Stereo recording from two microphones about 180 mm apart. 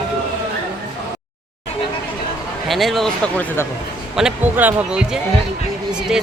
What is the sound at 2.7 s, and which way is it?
Speech, centre (ahead or behind).